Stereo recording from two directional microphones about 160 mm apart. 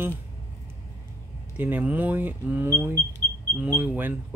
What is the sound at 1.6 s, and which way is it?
Speech, 10° right (ahead or behind).